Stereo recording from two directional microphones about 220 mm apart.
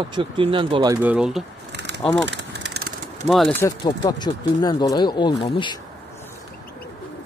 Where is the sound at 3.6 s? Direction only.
20° left (ahead or behind).